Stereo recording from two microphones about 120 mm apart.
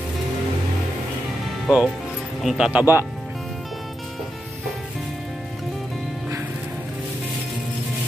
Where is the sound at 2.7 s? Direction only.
15° right (ahead or behind).